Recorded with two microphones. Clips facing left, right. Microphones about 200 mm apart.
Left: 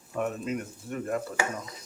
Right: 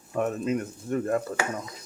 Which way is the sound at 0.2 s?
45° right (ahead or behind).